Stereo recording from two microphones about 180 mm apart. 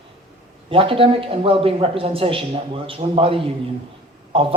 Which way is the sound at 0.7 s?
30° right (ahead or behind).